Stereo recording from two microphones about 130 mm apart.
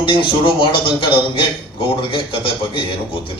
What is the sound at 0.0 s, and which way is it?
A man's voice, 40° left (ahead or behind).